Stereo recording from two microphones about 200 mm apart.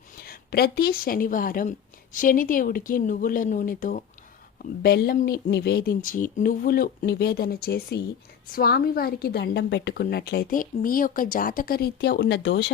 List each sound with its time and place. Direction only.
0.2 s speech: 50° left (ahead or behind)